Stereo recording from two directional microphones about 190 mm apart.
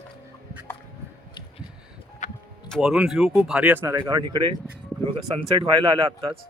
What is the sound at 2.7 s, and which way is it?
Speech, 5° right (ahead or behind).